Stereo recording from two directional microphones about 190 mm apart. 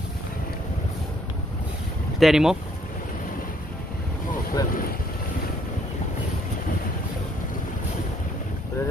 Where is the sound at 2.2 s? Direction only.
Centre (ahead or behind).